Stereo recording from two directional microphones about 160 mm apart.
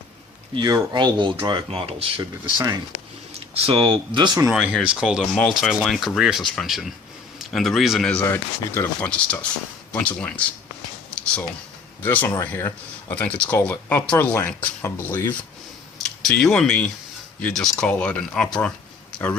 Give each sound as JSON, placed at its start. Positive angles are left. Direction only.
{"t": 0.5, "sound": "speech", "side_deg": -30}
{"t": 3.5, "sound": "speech", "side_deg": -35}
{"t": 4.5, "sound": "speech", "side_deg": -5}
{"t": 12.0, "sound": "speech", "side_deg": 15}
{"t": 16.0, "sound": "speech", "side_deg": 5}